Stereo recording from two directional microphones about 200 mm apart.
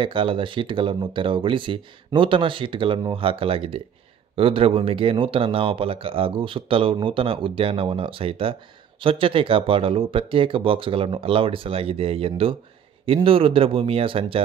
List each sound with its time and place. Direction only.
0.0 s speech: 25° right (ahead or behind)